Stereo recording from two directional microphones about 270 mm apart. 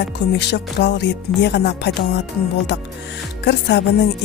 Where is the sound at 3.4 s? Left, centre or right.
Left.